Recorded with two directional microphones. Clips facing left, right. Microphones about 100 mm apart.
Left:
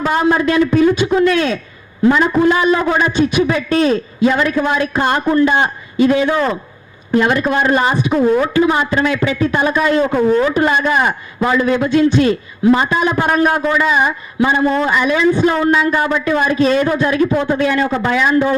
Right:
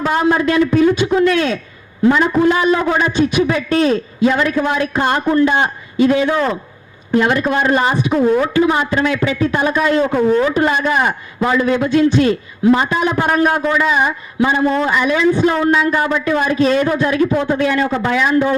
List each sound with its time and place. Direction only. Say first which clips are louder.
0.0 s a man's voice: left 1 dB; 25° left (ahead or behind)
8.1 s speech: left 1 dB; 35° left (ahead or behind)
8.5 s a man's voice: left 1 dB; 20° left (ahead or behind)
10.0 s a man's voice: even; 35° left (ahead or behind)